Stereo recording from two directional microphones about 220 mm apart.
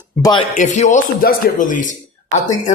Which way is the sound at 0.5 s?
35° left (ahead or behind).